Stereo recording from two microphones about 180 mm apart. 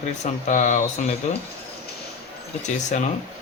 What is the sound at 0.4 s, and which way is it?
Speech, 45° left (ahead or behind).